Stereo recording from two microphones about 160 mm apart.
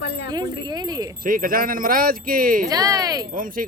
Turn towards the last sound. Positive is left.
turn(degrees=-60)  # may be behind; listen again after turning